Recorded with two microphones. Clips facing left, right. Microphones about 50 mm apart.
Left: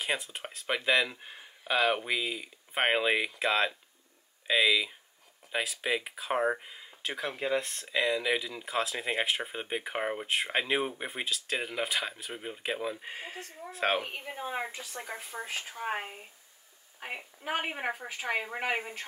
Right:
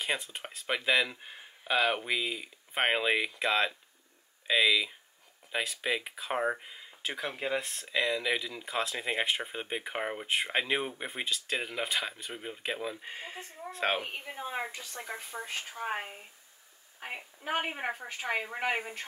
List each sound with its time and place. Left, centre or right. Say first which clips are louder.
0.0 s speech: left 1 dB; centre
13.4 s speech: left 1 dB; centre
13.7 s speech: left 2 dB; centre